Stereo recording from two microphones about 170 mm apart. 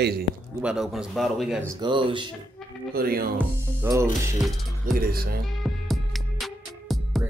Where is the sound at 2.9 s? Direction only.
60° right (ahead or behind).